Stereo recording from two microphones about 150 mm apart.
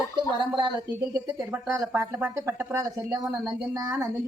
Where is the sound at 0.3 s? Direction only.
30° right (ahead or behind).